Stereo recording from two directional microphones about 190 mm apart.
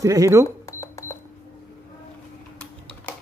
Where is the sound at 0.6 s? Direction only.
15° left (ahead or behind).